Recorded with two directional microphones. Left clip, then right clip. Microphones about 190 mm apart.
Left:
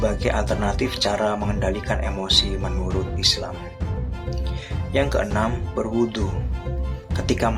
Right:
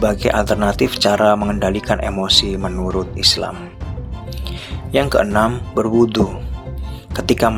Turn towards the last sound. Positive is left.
turn(degrees=-40)  # may be behind; listen again after turning